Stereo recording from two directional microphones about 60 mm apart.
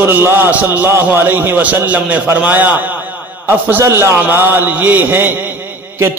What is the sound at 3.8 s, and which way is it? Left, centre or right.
A man's voice, right.